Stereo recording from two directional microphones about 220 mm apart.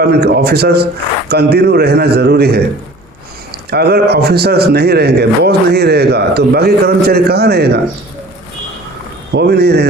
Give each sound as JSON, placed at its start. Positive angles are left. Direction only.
{"t": 0.1, "sound": "a man's voice", "side_deg": -45}
{"t": 9.3, "sound": "a man's voice", "side_deg": -50}